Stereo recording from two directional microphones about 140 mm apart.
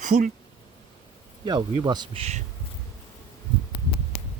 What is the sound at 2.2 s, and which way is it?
Speech, 50° right (ahead or behind).